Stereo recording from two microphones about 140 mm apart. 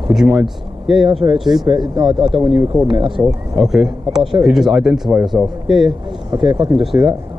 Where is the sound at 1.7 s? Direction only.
30° right (ahead or behind).